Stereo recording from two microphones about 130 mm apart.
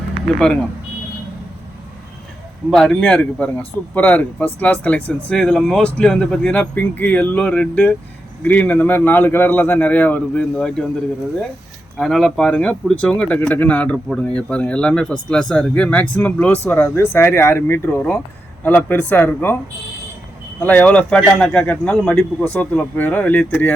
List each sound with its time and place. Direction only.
0.3 s speech: 5° left (ahead or behind)
2.6 s speech: 5° left (ahead or behind)
11.9 s speech: centre (ahead or behind)
20.6 s speech: 10° left (ahead or behind)